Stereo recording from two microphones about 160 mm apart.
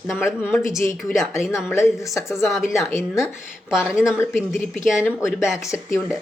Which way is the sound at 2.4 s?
Centre (ahead or behind).